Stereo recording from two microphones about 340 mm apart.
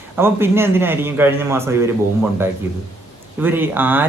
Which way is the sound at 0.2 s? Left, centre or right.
Centre.